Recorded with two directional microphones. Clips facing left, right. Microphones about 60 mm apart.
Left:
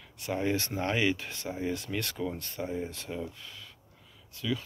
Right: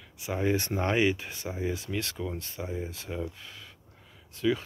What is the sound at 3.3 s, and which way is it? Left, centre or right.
Speech, right.